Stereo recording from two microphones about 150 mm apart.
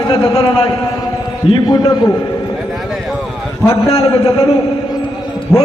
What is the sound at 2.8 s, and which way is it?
Clip-clop, centre (ahead or behind).